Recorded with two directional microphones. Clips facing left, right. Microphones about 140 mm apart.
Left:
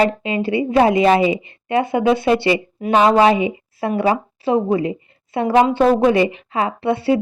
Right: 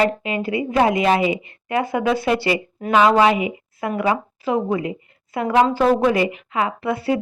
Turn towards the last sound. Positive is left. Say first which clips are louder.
# left 4 dB
turn(degrees=25)  # may be behind; listen again after turning